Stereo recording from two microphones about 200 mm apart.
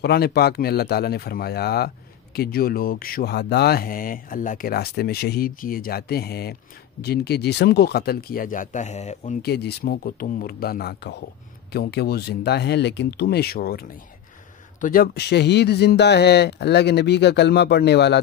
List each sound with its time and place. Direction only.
0.0 s speech: 55° left (ahead or behind); by 9.4 s 35° left (ahead or behind)
9.4 s speech: 55° left (ahead or behind)